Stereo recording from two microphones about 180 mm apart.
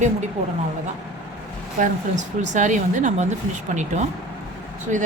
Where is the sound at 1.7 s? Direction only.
45° right (ahead or behind).